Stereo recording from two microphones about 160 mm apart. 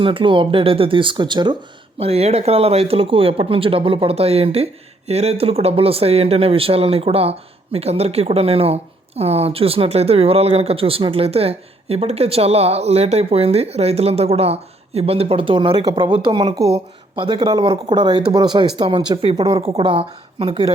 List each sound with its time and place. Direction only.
0.0 s speech: 35° right (ahead or behind)
2.0 s speech: 40° right (ahead or behind)